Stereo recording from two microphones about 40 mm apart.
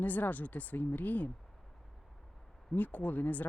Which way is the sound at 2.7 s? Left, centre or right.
Left.